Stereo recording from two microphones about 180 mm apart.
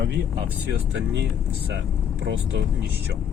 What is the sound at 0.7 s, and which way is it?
Speech, 70° right (ahead or behind).